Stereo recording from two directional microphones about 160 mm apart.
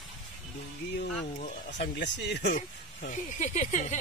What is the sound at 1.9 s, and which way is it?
Speech, 90° left.